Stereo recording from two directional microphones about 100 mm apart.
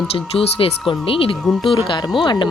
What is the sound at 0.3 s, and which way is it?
A woman's voice, 65° left (ahead or behind).